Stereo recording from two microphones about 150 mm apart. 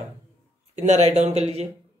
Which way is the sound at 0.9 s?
45° right (ahead or behind).